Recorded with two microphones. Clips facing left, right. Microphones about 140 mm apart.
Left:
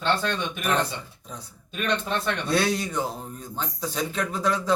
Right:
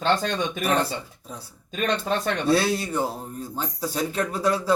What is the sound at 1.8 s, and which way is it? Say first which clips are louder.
Speech: right 2 dB; 40° right (ahead or behind).